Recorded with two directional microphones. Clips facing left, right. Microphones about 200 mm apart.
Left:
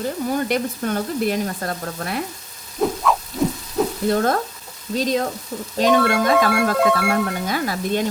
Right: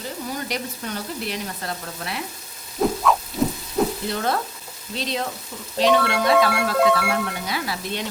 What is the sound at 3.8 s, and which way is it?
Frying, centre (ahead or behind).